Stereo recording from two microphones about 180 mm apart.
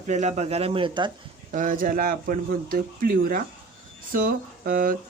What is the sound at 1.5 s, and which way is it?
Speech, 50° right (ahead or behind).